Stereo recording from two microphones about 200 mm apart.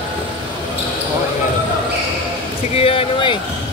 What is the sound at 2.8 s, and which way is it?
Speech, 30° left (ahead or behind).